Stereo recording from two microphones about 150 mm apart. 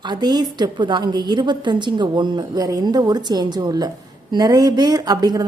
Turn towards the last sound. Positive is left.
turn(degrees=-25)  # may be behind; listen again after turning